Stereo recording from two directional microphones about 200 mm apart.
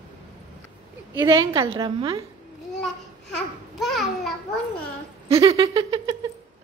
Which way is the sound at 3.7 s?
Centre (ahead or behind).